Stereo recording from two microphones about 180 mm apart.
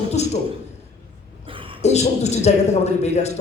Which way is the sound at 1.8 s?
40° left (ahead or behind).